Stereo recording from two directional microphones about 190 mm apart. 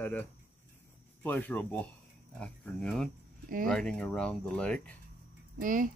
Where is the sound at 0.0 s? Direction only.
10° left (ahead or behind).